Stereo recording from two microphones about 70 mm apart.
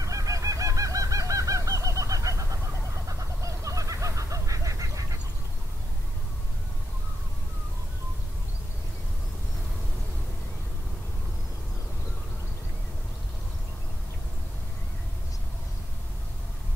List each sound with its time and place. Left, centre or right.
0.0 s fowl: right
3.1 s goose: right